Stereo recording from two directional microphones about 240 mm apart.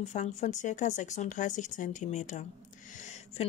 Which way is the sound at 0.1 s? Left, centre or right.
Left.